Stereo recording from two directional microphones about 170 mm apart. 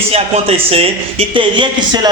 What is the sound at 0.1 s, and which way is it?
A man's voice, 35° right (ahead or behind).